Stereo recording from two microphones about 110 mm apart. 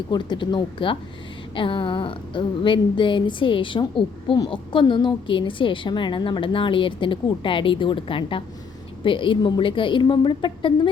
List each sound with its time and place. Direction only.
0.1 s a woman's voice: 40° left (ahead or behind)